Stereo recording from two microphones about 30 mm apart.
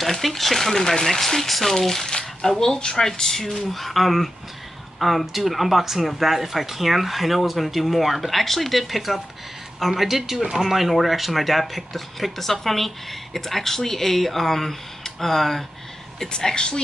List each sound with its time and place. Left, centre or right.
0.0 s speech: centre
2.0 s a sound: left
2.6 s speech: left
16.3 s a woman's voice: left